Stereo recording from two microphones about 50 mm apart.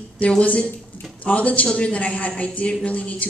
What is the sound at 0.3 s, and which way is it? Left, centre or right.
Speech, left.